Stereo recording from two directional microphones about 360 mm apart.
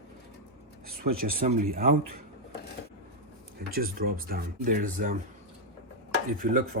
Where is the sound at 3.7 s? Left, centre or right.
Right.